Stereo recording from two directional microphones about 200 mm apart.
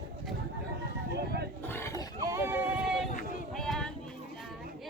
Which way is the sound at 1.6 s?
10° left (ahead or behind).